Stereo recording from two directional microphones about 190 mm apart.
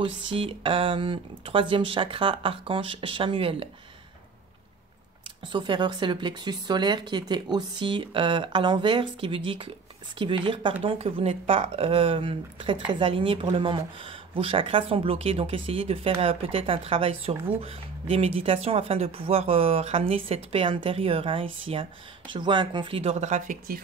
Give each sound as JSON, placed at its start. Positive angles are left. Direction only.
{"t": 0.0, "sound": "speech", "side_deg": -30}
{"t": 5.4, "sound": "speech", "side_deg": -25}